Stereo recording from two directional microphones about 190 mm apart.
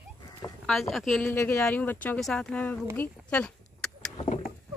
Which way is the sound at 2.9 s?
10° left (ahead or behind).